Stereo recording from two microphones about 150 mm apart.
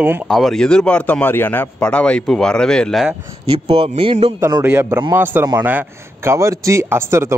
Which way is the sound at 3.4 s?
40° right (ahead or behind).